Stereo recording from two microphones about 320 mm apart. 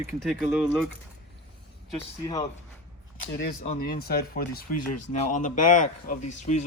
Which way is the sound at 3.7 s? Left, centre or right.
Left.